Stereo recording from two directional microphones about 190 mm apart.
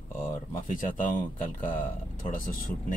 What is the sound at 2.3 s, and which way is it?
Speech, 45° left (ahead or behind).